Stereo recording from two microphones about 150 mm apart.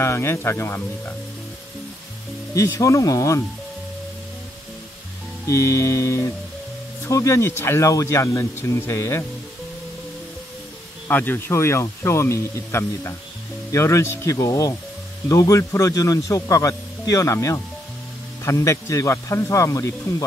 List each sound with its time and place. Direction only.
0.0 s speech: 15° left (ahead or behind)
2.5 s speech: 20° left (ahead or behind)
5.5 s speech: 20° left (ahead or behind)
11.1 s speech: 15° left (ahead or behind)